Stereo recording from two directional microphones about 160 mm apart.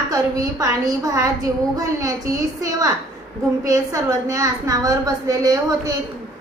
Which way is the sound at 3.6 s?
20° right (ahead or behind).